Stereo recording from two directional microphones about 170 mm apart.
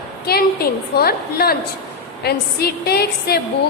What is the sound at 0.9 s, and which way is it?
A woman's voice, 65° left (ahead or behind).